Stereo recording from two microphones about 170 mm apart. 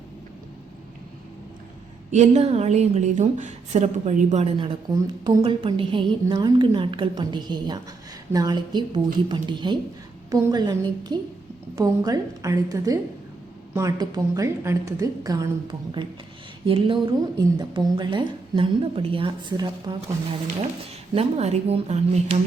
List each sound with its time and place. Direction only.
2.1 s a woman's voice: 40° right (ahead or behind)
21.2 s a woman's voice: 35° right (ahead or behind)